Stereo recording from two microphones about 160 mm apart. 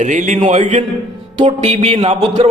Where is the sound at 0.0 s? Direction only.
50° right (ahead or behind).